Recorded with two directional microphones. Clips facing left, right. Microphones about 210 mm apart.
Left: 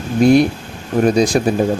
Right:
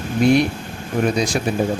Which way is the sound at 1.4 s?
40° left (ahead or behind).